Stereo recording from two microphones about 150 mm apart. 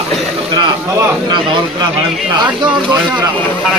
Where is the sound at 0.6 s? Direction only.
30° right (ahead or behind).